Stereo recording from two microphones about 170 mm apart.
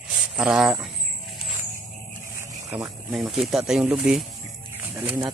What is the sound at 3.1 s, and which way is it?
Speech, centre (ahead or behind).